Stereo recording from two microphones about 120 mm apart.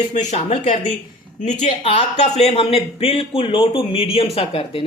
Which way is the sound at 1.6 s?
65° left (ahead or behind).